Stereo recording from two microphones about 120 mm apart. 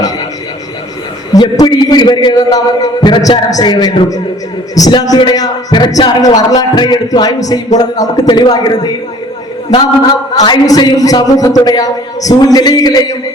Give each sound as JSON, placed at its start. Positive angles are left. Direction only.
{"t": 1.3, "sound": "a man's voice", "side_deg": 35}
{"t": 10.4, "sound": "a man's voice", "side_deg": 40}